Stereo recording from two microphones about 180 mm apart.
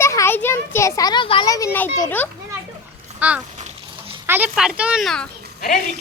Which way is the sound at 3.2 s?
10° right (ahead or behind).